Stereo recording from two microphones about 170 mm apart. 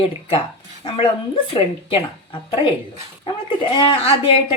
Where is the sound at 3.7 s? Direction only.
30° left (ahead or behind).